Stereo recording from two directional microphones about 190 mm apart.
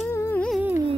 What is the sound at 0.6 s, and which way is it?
Carnatic music, 10° right (ahead or behind).